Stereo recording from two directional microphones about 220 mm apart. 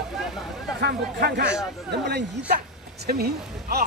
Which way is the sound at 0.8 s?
50° right (ahead or behind).